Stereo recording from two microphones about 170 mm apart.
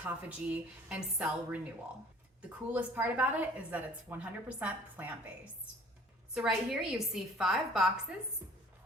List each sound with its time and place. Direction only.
0.0 s a woman's voice: 10° right (ahead or behind)
2.7 s a woman's voice: 10° right (ahead or behind)
6.3 s a woman's voice: 5° right (ahead or behind)
8.4 s a woman's voice: 15° right (ahead or behind)